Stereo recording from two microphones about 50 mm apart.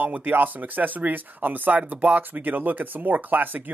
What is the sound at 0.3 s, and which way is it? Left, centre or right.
Speech, right.